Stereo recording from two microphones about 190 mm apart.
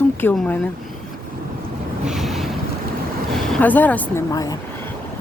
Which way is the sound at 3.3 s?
10° left (ahead or behind).